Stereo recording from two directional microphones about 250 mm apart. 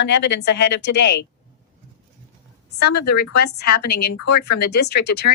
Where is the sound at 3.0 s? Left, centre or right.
Left.